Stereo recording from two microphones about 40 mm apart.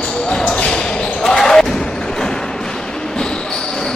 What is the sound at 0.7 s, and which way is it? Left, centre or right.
Basketball bounce, left.